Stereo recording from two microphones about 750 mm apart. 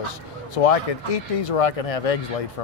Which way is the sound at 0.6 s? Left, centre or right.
Left.